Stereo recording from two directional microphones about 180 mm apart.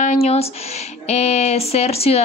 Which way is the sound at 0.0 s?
40° left (ahead or behind).